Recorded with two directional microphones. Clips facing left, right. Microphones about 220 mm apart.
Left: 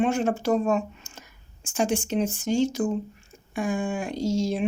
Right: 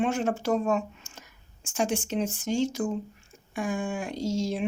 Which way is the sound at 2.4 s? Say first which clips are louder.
Left 3 dB; 35° left (ahead or behind).